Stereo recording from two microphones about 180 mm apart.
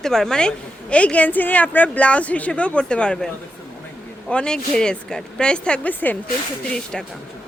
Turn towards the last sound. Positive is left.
turn(degrees=5)  # may be behind; listen again after turning